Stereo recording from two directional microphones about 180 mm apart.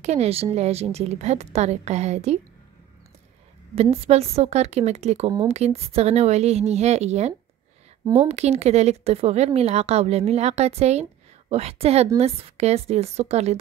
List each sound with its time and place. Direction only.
0.0 s a woman's voice: 35° right (ahead or behind)
3.7 s a woman's voice: 35° right (ahead or behind)